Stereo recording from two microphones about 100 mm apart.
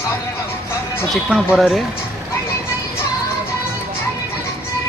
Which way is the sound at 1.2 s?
5° right (ahead or behind).